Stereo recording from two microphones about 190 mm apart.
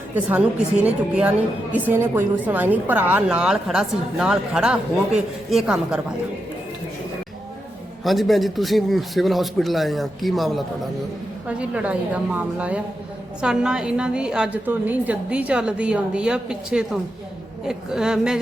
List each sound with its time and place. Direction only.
0.1 s a woman's voice: 10° right (ahead or behind)
8.0 s a woman's voice: centre (ahead or behind)